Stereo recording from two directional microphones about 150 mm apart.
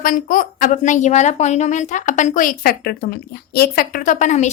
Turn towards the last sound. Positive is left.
turn(degrees=50)  # may be behind; listen again after turning